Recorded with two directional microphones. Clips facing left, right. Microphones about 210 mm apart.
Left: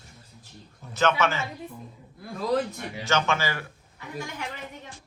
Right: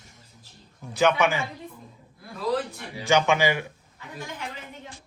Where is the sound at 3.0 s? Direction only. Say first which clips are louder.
Right 5 dB; 15° right (ahead or behind).